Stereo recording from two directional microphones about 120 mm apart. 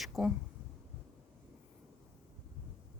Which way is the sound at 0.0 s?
5° right (ahead or behind).